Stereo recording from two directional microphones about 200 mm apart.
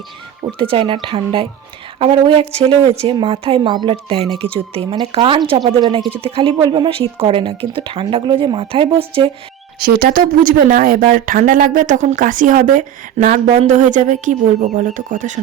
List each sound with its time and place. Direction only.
0.4 s a woman's voice: 25° right (ahead or behind)
9.8 s speech: 45° right (ahead or behind)